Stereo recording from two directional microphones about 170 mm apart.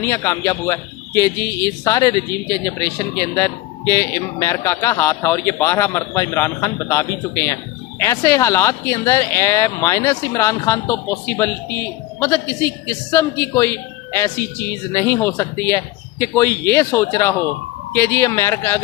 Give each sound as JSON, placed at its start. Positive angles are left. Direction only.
{"t": 0.0, "sound": "speech", "side_deg": 15}